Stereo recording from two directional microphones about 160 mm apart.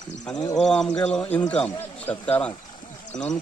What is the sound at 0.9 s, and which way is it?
Speech, 5° left (ahead or behind).